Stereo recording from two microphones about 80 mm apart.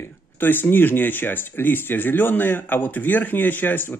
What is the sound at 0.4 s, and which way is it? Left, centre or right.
Speech, left.